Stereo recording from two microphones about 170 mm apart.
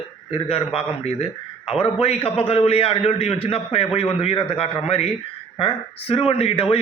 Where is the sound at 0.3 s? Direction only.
35° left (ahead or behind).